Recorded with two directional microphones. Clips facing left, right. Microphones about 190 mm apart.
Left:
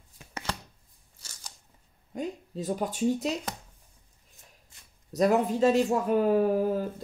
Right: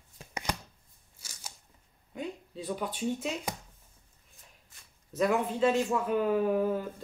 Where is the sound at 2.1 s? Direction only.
40° left (ahead or behind).